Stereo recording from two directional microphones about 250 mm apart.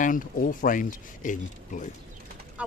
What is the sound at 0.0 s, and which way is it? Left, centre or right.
Speech, left.